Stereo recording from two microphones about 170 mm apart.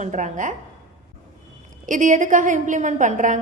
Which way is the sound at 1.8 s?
50° right (ahead or behind).